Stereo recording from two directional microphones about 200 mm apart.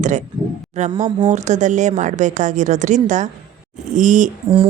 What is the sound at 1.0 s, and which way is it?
Speech, 20° right (ahead or behind).